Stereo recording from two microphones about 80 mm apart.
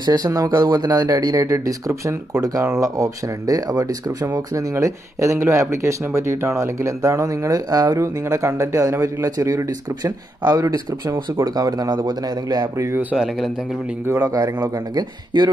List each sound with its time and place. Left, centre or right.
0.0 s speech: right
8.2 s a man's voice: right
12.7 s speech: right
13.1 s speech: centre
14.1 s speech: right
15.3 s speech: right